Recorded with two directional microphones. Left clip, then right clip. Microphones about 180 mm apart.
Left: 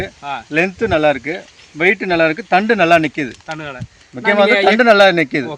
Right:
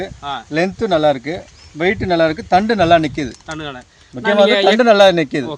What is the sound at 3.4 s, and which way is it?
Speech, 40° left (ahead or behind).